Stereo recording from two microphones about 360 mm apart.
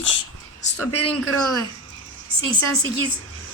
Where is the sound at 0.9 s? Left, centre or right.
Left.